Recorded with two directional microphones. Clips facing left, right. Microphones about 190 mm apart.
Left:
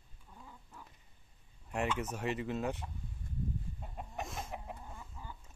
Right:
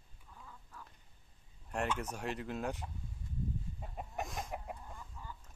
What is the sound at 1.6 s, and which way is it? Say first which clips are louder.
Speech: left 1 dB; 5° left (ahead or behind).